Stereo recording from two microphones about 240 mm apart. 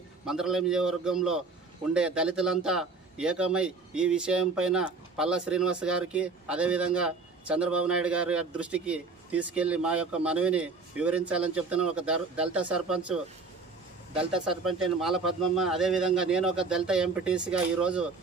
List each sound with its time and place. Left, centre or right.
0.2 s a man's voice: centre